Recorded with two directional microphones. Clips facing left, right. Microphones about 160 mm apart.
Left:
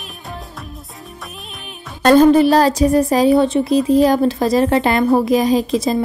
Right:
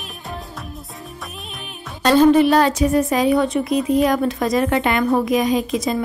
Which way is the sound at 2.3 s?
35° left (ahead or behind).